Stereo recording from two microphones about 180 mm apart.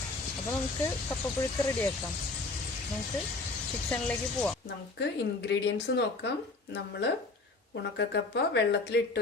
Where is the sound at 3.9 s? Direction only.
5° left (ahead or behind).